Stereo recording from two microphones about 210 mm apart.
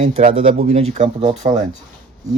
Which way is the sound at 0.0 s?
30° right (ahead or behind).